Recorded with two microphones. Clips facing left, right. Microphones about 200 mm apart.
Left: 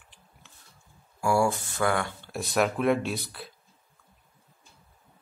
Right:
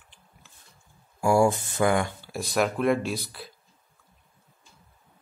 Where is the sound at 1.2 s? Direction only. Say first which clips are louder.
Right 4 dB; 20° right (ahead or behind).